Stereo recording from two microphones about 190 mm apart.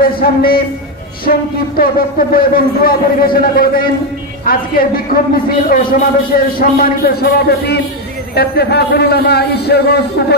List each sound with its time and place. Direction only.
0.0 s a man's voice: 50° left (ahead or behind)